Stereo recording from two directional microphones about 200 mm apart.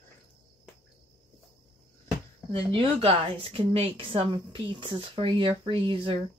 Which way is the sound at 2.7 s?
30° right (ahead or behind).